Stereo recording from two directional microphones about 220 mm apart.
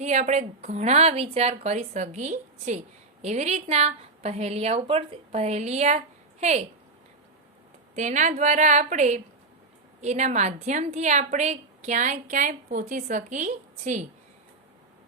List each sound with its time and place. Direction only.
0.0 s a woman's voice: 30° right (ahead or behind)
7.9 s a woman's voice: 35° right (ahead or behind)